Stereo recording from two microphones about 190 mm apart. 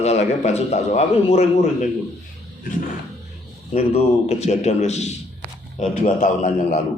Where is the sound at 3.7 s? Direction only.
35° left (ahead or behind).